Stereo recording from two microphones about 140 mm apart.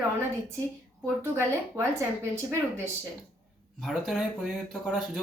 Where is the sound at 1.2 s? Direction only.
20° right (ahead or behind).